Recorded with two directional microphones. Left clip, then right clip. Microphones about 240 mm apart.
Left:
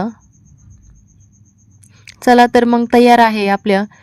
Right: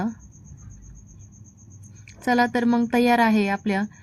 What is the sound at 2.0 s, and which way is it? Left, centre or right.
Speech, left.